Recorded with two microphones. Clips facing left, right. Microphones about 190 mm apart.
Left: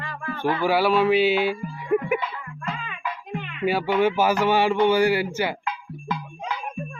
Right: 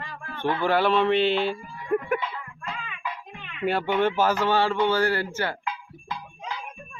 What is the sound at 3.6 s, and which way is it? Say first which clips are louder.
Speech: left 2 dB; 5° left (ahead or behind).